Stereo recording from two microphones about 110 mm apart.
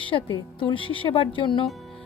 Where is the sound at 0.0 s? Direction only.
50° left (ahead or behind).